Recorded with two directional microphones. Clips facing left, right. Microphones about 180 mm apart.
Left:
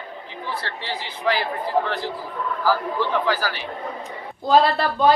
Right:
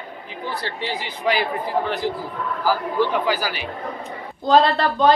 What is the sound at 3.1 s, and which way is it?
Speech, 15° right (ahead or behind).